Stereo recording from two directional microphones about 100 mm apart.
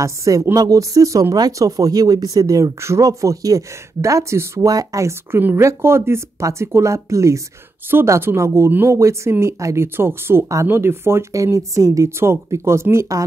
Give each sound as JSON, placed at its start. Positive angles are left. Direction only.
{"t": 0.0, "sound": "speech", "side_deg": -35}